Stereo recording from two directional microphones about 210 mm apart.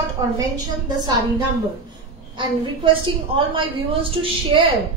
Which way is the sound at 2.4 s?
25° right (ahead or behind).